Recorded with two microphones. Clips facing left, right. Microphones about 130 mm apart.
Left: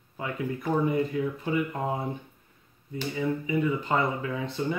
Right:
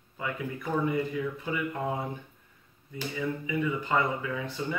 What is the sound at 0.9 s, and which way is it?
Speech, 25° left (ahead or behind).